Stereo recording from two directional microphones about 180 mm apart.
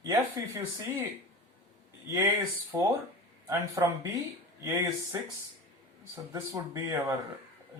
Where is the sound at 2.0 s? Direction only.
15° right (ahead or behind).